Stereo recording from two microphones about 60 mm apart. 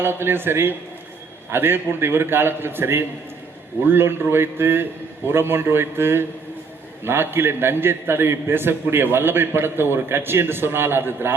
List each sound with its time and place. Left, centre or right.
0.0 s a man's voice: right